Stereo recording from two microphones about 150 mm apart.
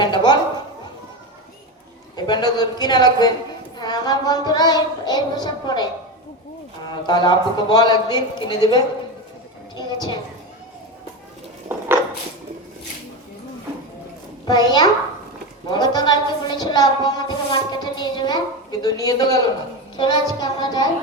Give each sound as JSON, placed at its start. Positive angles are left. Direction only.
{"t": 0.0, "sound": "a sound", "side_deg": 30}
{"t": 2.1, "sound": "a woman's voice", "side_deg": 30}
{"t": 14.4, "sound": "a child's voice", "side_deg": 25}